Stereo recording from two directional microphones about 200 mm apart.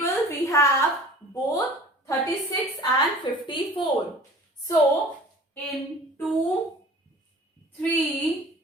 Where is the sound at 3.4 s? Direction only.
25° left (ahead or behind).